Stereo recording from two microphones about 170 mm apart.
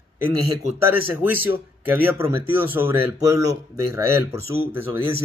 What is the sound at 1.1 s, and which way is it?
Speech, 15° right (ahead or behind).